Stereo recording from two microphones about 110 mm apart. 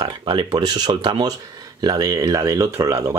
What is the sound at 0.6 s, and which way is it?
Speech, 40° right (ahead or behind).